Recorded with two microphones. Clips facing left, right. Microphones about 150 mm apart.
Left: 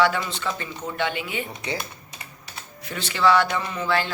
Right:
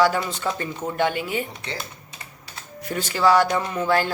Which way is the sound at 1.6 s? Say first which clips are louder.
Left 3 dB; 15° left (ahead or behind).